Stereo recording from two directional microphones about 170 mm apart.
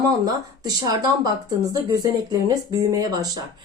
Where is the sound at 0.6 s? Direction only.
25° right (ahead or behind).